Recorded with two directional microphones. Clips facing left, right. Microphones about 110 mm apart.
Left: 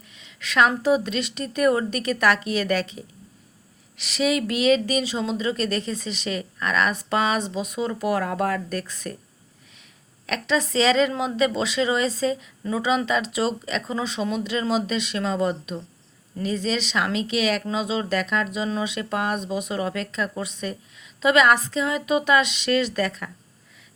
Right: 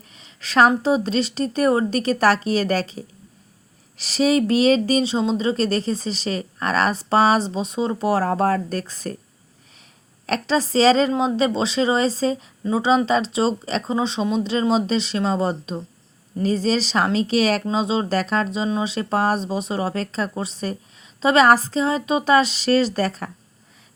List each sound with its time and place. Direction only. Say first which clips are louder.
0.2 s a sound: right 4 dB; 35° right (ahead or behind)
0.7 s speech: right 2 dB; 30° right (ahead or behind)
10.2 s speech: right 3 dB; 35° right (ahead or behind)
11.1 s speech: right 6 dB; 20° right (ahead or behind)
11.3 s speech: right 2 dB; 30° right (ahead or behind)